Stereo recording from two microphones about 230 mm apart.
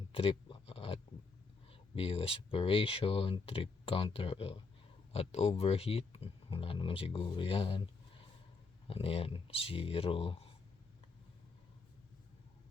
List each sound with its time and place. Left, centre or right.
0.1 s a sound: left
1.7 s speech: left
8.9 s speech: left